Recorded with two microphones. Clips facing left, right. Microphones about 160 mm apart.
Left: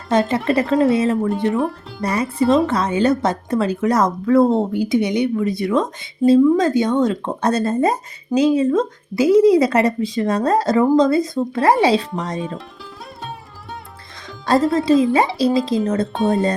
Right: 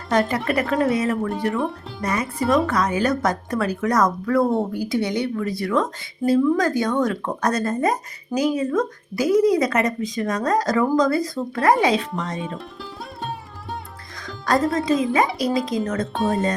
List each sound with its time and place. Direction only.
0.1 s a woman's voice: 25° left (ahead or behind)
14.3 s a woman's voice: 30° left (ahead or behind)